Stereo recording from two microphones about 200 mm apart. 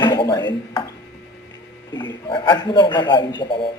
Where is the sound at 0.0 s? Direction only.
20° left (ahead or behind).